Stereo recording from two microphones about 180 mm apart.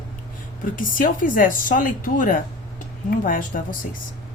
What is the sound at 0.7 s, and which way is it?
A woman's voice, 50° left (ahead or behind).